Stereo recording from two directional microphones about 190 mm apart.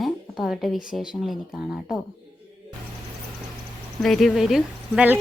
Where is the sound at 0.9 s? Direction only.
Centre (ahead or behind).